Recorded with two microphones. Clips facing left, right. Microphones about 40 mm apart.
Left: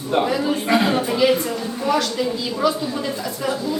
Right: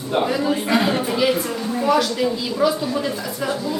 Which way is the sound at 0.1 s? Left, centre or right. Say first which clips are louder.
Even; centre.